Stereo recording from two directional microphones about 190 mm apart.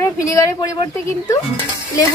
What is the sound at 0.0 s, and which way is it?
Speech, 20° left (ahead or behind).